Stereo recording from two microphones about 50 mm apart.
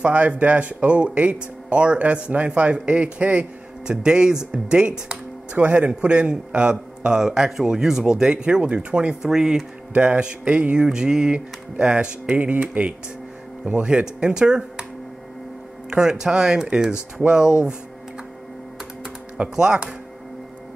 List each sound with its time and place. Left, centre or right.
0.0 s a man's voice: right
5.6 s a man's voice: right; by 9.6 s centre
9.9 s a man's voice: right
10.9 s a man's voice: centre
15.9 s speech: centre
17.2 s a man's voice: right
19.5 s speech: centre